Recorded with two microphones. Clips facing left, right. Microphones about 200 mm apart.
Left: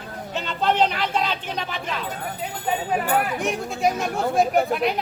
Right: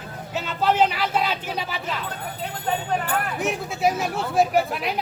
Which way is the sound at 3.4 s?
Centre (ahead or behind).